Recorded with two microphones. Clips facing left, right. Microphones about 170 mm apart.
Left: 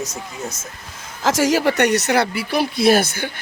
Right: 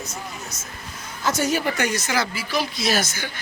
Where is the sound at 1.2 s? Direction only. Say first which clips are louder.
Left 6 dB; 90° left.